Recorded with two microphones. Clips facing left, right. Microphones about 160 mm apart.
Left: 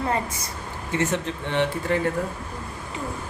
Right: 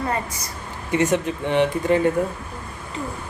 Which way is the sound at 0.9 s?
15° right (ahead or behind).